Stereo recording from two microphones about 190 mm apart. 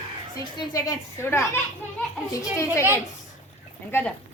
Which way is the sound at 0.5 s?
15° left (ahead or behind).